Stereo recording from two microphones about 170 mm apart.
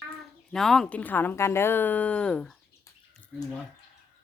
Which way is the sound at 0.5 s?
5° left (ahead or behind).